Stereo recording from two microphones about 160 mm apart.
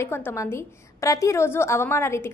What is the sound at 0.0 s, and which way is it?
A woman's voice, 15° left (ahead or behind).